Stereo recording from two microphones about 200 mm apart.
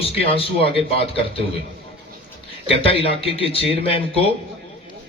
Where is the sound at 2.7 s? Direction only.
30° left (ahead or behind).